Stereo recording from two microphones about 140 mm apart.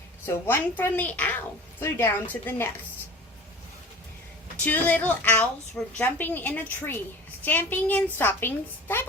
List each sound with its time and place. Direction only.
0.3 s a woman's voice: 15° left (ahead or behind)
4.6 s a woman's voice: 15° left (ahead or behind)